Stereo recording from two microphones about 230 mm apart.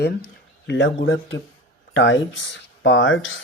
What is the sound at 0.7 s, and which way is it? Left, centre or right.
Speech, left.